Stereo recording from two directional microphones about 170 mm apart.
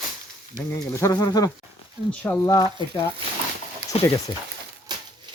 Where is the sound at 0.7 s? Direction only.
20° left (ahead or behind).